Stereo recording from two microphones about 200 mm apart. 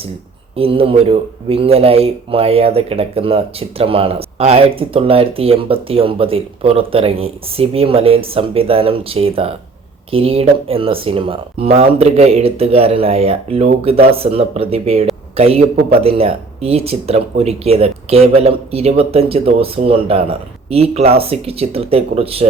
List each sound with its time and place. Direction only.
0.5 s speech: 30° right (ahead or behind)